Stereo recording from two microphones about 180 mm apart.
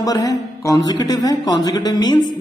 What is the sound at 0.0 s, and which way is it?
A man's voice, 20° left (ahead or behind).